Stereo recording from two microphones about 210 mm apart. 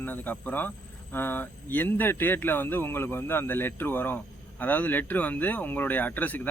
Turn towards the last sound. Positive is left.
turn(degrees=10)  # may be behind; listen again after turning